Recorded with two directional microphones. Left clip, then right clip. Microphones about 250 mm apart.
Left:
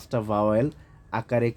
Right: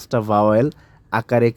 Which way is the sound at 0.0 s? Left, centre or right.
Right.